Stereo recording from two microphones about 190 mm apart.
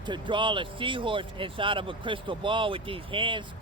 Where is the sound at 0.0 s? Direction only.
25° right (ahead or behind).